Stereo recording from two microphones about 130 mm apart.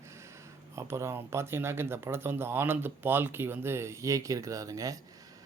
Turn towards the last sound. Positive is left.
turn(degrees=-25)  # may be behind; listen again after turning